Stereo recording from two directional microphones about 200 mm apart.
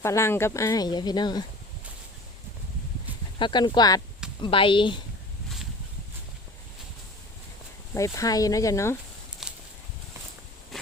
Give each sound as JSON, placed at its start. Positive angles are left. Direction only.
{"t": 0.0, "sound": "speech", "side_deg": 15}
{"t": 3.3, "sound": "speech", "side_deg": 25}
{"t": 7.9, "sound": "speech", "side_deg": 15}
{"t": 9.4, "sound": "a sound", "side_deg": -5}